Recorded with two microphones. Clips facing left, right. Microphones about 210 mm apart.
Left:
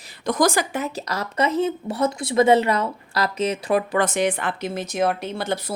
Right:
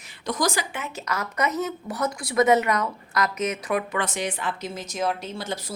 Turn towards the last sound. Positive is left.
turn(degrees=60)  # may be behind; listen again after turning